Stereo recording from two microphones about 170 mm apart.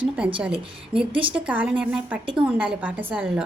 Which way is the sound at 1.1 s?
30° right (ahead or behind).